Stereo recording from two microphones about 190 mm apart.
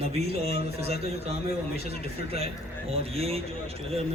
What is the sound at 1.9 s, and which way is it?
A man's voice, 30° right (ahead or behind).